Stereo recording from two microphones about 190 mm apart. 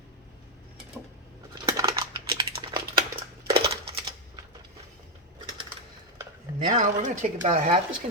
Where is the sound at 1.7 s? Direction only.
15° right (ahead or behind).